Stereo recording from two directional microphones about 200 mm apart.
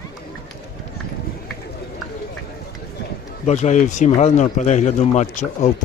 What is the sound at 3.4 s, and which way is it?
A man's voice, 35° left (ahead or behind).